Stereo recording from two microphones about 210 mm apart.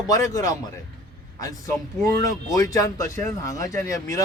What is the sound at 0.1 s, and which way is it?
Speech, 15° left (ahead or behind).